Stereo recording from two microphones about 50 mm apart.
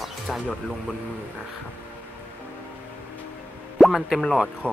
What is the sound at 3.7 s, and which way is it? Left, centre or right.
Speech, centre.